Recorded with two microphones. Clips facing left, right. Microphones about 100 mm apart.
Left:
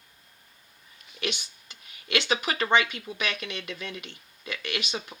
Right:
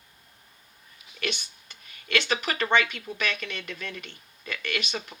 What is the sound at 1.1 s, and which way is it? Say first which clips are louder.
Speech: even; 10° left (ahead or behind).